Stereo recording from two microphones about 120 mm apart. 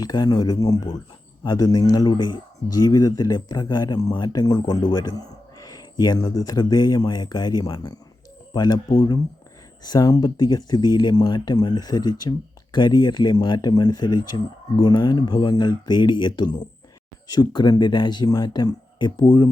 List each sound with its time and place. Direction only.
0.0 s speech: 35° left (ahead or behind)